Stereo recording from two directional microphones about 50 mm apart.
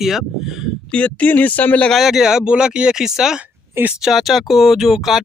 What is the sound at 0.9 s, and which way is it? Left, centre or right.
Speech, left.